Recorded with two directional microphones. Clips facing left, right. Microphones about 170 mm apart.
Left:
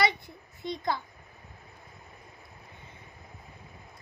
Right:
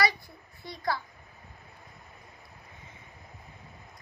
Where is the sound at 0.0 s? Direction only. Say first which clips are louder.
Left 1 dB; 20° left (ahead or behind).